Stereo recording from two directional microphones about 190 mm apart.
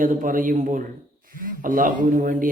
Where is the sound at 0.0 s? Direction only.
45° right (ahead or behind).